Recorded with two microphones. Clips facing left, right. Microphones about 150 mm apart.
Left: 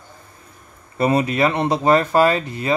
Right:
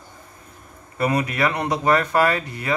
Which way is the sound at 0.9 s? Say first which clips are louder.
Left 4 dB; 25° left (ahead or behind).